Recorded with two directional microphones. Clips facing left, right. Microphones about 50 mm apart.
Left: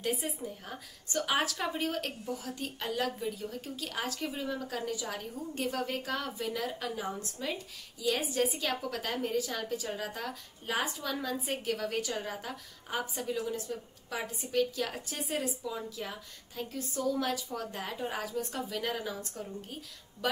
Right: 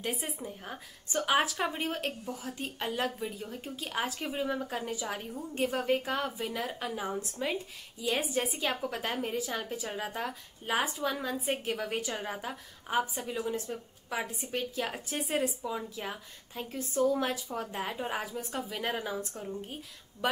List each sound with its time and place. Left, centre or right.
0.0 s a woman's voice: centre